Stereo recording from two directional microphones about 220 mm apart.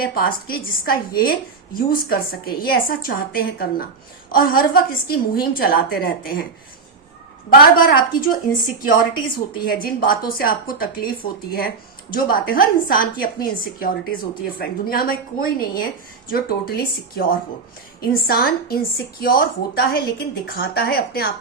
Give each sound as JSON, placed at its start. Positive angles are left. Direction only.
{"t": 0.0, "sound": "a woman's voice", "side_deg": 40}
{"t": 7.5, "sound": "a woman's voice", "side_deg": 40}
{"t": 12.1, "sound": "a woman's voice", "side_deg": 40}